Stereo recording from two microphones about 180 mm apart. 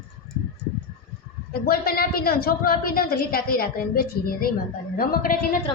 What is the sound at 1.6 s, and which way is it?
A woman's voice, 55° left (ahead or behind).